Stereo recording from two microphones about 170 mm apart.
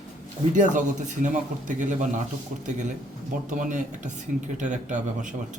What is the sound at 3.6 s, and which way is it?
A man's voice, 50° right (ahead or behind).